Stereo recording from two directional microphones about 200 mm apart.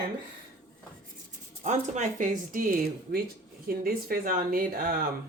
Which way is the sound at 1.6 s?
35° right (ahead or behind).